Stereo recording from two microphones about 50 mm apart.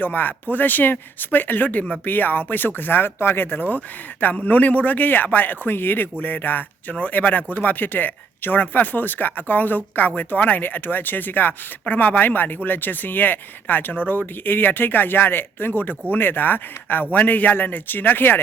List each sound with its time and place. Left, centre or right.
0.0 s speech: left